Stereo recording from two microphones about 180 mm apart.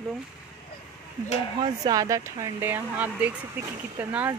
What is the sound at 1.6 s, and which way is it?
Speech, 20° right (ahead or behind).